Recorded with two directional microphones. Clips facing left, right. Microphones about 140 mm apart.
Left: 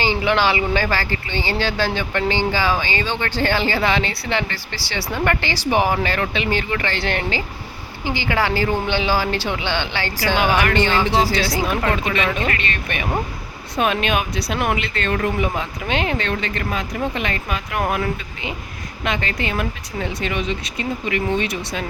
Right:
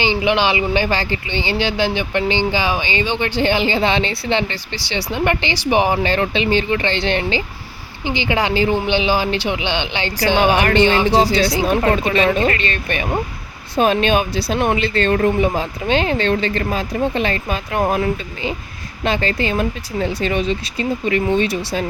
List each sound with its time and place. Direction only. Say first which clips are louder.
0.0 s speech: right 2 dB; 20° right (ahead or behind)
11.7 s speech: right 5 dB; 35° right (ahead or behind)